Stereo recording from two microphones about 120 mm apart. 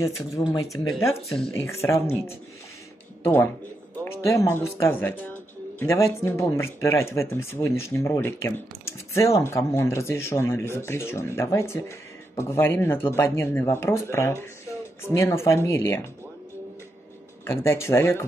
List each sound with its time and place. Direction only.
0.4 s speech: 30° left (ahead or behind)
0.8 s speech: centre (ahead or behind)
1.5 s speech: 25° left (ahead or behind)
4.0 s speech: 25° left (ahead or behind)
17.5 s speech: 20° left (ahead or behind)